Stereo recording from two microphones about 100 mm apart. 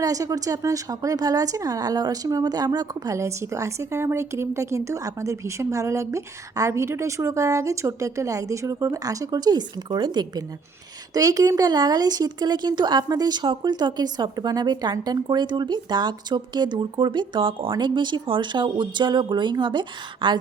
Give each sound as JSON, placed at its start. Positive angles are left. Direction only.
{"t": 0.0, "sound": "a woman's voice", "side_deg": -35}